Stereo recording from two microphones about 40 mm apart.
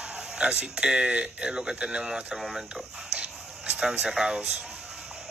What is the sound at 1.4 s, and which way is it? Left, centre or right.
Speech, right.